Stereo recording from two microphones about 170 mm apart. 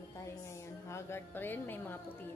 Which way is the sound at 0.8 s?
15° left (ahead or behind).